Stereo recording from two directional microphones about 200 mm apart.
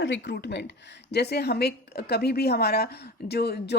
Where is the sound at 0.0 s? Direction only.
60° left (ahead or behind).